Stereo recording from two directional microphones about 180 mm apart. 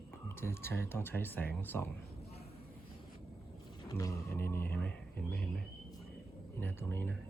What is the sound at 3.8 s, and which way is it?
A man's voice, 20° left (ahead or behind).